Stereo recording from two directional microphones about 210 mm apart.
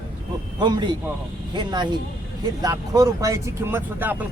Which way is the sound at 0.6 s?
20° right (ahead or behind).